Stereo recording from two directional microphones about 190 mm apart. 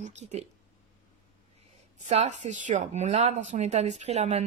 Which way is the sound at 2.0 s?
35° right (ahead or behind).